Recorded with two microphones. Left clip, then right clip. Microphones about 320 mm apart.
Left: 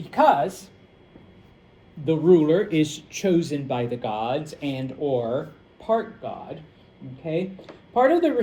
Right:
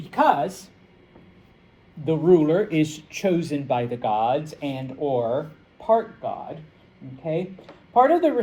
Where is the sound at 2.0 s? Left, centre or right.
Centre.